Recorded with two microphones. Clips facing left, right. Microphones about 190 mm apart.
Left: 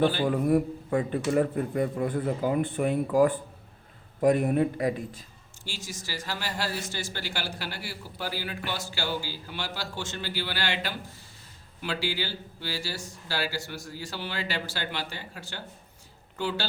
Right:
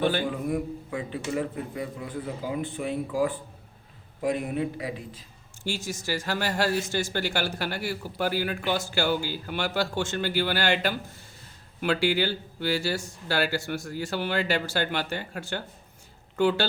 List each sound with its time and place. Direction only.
0.0 s speech: 55° right (ahead or behind)
0.3 s speech: 50° left (ahead or behind)
5.6 s speech: 50° right (ahead or behind)